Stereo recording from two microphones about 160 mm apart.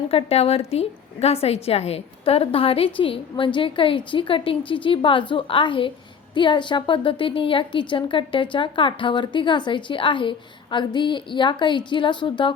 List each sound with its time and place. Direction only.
0.1 s a woman's voice: 40° left (ahead or behind)